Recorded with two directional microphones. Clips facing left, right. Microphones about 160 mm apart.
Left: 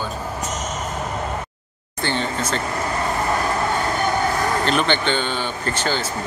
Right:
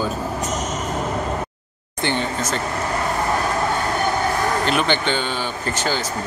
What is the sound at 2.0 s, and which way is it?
Speech, 15° right (ahead or behind).